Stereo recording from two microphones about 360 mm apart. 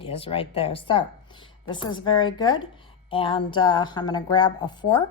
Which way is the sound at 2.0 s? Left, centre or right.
Centre.